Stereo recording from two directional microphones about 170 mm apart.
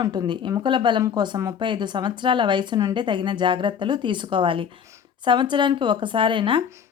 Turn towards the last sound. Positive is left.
turn(degrees=-30)  # may be behind; listen again after turning